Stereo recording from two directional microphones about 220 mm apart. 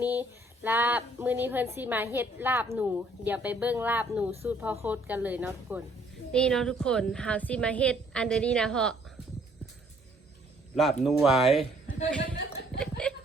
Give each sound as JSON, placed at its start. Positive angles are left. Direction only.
{"t": 0.0, "sound": "speech", "side_deg": -10}
{"t": 6.3, "sound": "a woman's voice", "side_deg": 5}
{"t": 10.8, "sound": "a woman's voice", "side_deg": 0}
{"t": 12.4, "sound": "chuckle", "side_deg": 50}
{"t": 12.8, "sound": "speech", "side_deg": 5}